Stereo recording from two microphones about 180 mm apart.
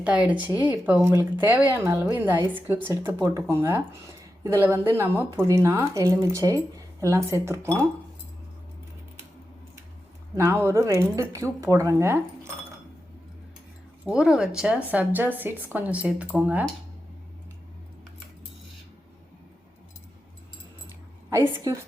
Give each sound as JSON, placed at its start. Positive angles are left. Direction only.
{"t": 0.0, "sound": "speech", "side_deg": -5}
{"t": 10.3, "sound": "speech", "side_deg": -15}
{"t": 14.0, "sound": "speech", "side_deg": -5}
{"t": 21.2, "sound": "a woman's voice", "side_deg": -15}